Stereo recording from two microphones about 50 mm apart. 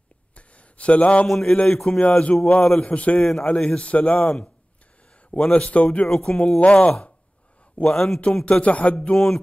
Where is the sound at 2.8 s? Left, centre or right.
Left.